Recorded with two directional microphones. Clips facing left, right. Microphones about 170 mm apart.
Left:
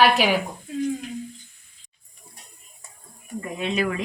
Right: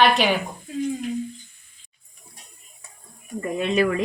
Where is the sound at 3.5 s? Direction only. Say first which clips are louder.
Right 4 dB; 50° right (ahead or behind).